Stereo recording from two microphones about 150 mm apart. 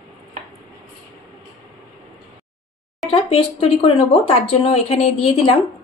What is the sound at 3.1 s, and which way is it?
Speech, 40° left (ahead or behind).